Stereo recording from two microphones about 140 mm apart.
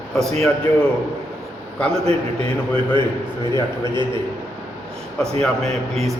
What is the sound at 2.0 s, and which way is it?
A man's voice, 45° right (ahead or behind).